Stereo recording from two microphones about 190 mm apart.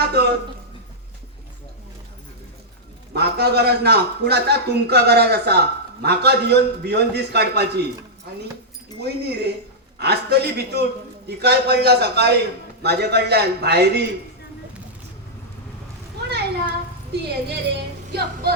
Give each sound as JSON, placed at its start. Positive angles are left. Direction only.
{"t": 0.0, "sound": "a sound", "side_deg": -60}
{"t": 3.1, "sound": "a man's voice", "side_deg": -60}
{"t": 9.0, "sound": "a man's voice", "side_deg": -60}
{"t": 17.1, "sound": "speech", "side_deg": -60}